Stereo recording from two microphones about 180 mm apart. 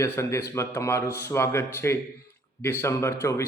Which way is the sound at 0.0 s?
15° left (ahead or behind).